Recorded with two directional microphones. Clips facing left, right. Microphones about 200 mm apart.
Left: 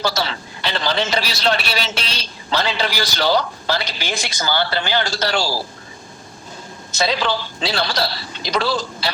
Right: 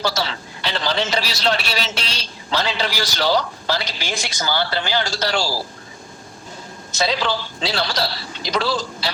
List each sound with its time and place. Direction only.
0.0 s a man's voice: 55° left (ahead or behind)
7.0 s a man's voice: 60° left (ahead or behind)